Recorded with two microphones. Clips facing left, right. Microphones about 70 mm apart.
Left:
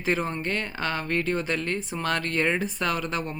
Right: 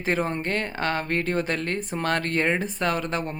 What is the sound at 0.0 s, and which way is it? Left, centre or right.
Speech, right.